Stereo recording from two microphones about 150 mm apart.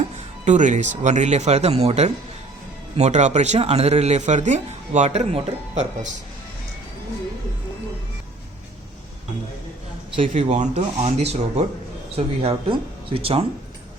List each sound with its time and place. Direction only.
0.4 s speech: 55° right (ahead or behind)
10.2 s speech: 45° right (ahead or behind)